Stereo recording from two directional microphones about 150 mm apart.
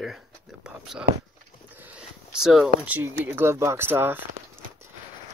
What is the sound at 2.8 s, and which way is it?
Speech, 10° right (ahead or behind).